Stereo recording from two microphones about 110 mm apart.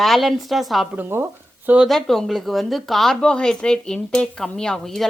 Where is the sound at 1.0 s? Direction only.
20° right (ahead or behind).